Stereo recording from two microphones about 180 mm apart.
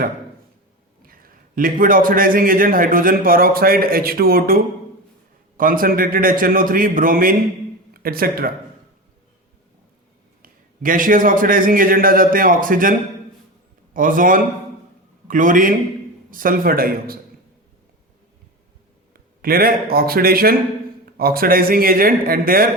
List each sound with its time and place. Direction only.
1.0 s a man's voice: 50° right (ahead or behind)
10.4 s a man's voice: 50° right (ahead or behind)
19.1 s a man's voice: 55° right (ahead or behind)